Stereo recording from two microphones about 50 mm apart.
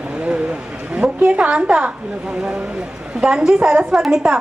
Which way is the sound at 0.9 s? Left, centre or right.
Right.